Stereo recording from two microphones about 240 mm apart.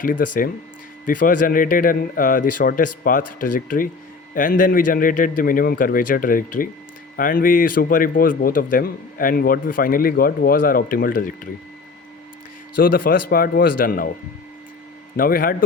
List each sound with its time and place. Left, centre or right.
0.0 s a man's voice: left
12.8 s a man's voice: left
15.1 s a man's voice: left